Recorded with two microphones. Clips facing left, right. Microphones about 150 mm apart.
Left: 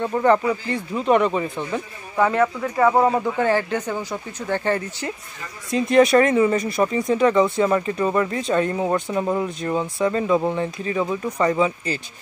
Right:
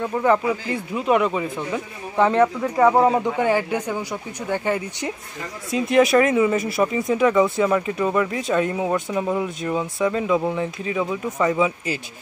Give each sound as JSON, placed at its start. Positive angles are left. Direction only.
{"t": 0.0, "sound": "speech", "side_deg": -5}
{"t": 2.1, "sound": "speech", "side_deg": -25}
{"t": 2.4, "sound": "speech", "side_deg": -10}